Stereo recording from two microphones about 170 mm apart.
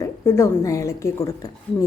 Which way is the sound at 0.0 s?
15° left (ahead or behind).